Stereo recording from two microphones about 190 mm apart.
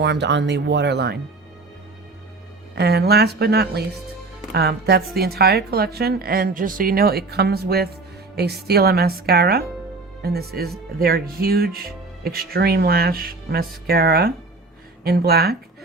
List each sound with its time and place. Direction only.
0.0 s a woman's voice: 65° right (ahead or behind)
2.7 s a woman's voice: 60° right (ahead or behind)